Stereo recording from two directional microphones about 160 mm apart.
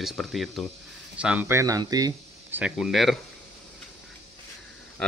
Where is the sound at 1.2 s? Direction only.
10° right (ahead or behind).